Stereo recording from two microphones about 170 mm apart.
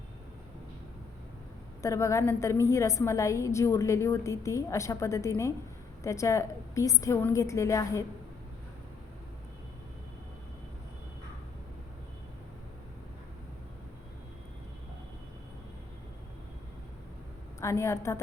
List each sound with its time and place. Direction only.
1.8 s a woman's voice: 20° left (ahead or behind)
17.6 s a woman's voice: 15° left (ahead or behind)